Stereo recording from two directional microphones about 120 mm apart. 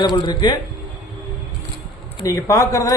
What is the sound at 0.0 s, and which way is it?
Speech, 40° left (ahead or behind).